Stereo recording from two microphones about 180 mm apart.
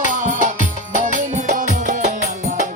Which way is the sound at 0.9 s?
45° right (ahead or behind).